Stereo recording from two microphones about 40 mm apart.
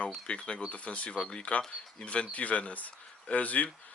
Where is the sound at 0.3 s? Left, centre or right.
Left.